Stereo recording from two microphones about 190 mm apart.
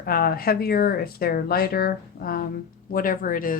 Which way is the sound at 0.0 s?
50° left (ahead or behind).